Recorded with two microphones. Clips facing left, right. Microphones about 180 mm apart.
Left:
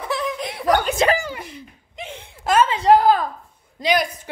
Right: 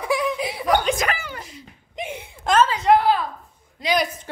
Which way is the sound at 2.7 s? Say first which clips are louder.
Left 3 dB; 35° left (ahead or behind).